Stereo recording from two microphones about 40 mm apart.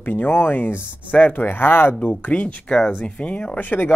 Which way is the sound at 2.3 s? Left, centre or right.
Left.